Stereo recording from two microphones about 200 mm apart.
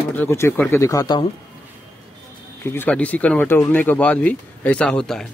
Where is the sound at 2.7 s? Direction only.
10° left (ahead or behind).